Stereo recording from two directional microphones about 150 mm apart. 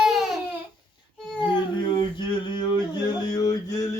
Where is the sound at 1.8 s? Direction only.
30° left (ahead or behind).